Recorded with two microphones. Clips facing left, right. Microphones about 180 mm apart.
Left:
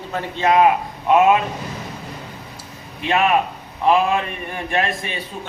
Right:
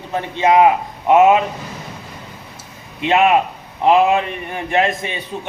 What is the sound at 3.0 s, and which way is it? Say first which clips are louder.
A man's voice: right 4 dB; 20° right (ahead or behind).